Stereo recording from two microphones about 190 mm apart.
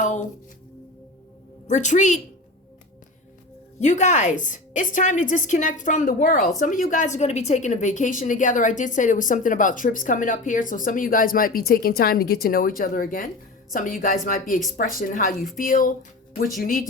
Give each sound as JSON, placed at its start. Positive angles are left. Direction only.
{"t": 0.0, "sound": "music", "side_deg": 40}
{"t": 1.6, "sound": "a woman's voice", "side_deg": 40}
{"t": 3.8, "sound": "a woman's voice", "side_deg": 40}